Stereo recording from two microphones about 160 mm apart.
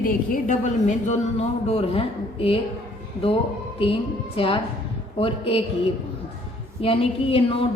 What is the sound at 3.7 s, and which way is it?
A woman's voice, 35° left (ahead or behind).